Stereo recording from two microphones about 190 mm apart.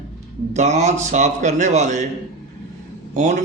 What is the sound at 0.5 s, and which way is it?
Speech, 40° right (ahead or behind).